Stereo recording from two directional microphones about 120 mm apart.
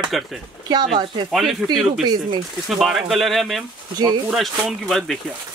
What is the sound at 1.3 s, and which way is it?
Speech, centre (ahead or behind).